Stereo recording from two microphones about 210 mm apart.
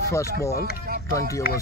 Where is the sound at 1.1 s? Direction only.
15° left (ahead or behind).